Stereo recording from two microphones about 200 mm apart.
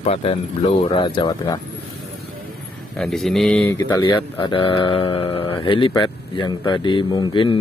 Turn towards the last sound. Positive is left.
turn(degrees=25)  # may be behind; listen again after turning